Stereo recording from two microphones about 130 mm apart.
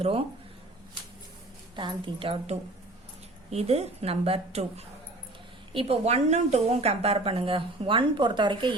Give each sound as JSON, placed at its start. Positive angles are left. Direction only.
{"t": 0.0, "sound": "a woman's voice", "side_deg": -45}
{"t": 1.7, "sound": "a woman's voice", "side_deg": -35}